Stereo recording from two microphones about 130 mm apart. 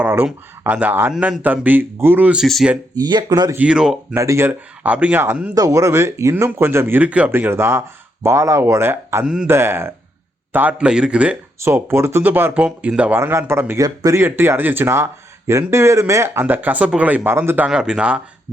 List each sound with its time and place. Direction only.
0.0 s speech: 15° right (ahead or behind)
2.9 s speech: 35° right (ahead or behind)
3.5 s speech: 10° right (ahead or behind)
4.1 s speech: 20° right (ahead or behind)
5.5 s speech: 25° right (ahead or behind)
9.2 s speech: 5° right (ahead or behind)
9.5 s speech: 20° right (ahead or behind)
11.6 s speech: 20° right (ahead or behind)
14.2 s speech: 15° right (ahead or behind)
17.7 s speech: 5° right (ahead or behind)